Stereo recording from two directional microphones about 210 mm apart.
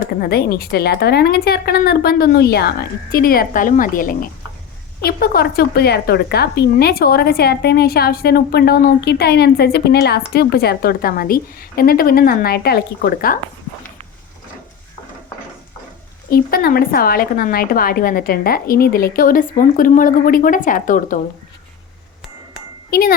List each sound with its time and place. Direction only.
0.2 s a woman's voice: 45° left (ahead or behind)
16.3 s a woman's voice: 45° left (ahead or behind)
22.9 s a child's voice: 45° left (ahead or behind)